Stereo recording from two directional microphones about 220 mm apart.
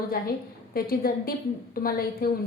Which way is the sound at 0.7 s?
45° left (ahead or behind).